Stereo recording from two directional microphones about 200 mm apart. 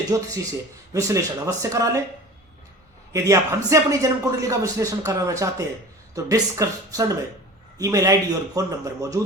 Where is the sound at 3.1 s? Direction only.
15° right (ahead or behind).